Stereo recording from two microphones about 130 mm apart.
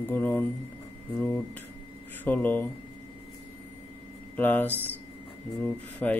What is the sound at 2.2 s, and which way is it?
Speech, 10° left (ahead or behind).